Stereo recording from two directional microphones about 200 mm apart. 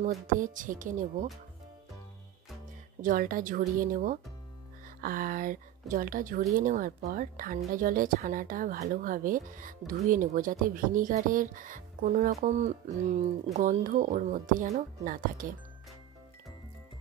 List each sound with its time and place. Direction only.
0.0 s speech: 40° right (ahead or behind)
3.0 s speech: 45° right (ahead or behind)